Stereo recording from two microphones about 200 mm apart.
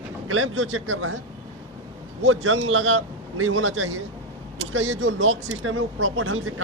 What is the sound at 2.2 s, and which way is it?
Speech, 80° right.